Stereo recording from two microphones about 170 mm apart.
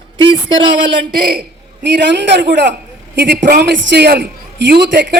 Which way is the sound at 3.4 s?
70° right (ahead or behind).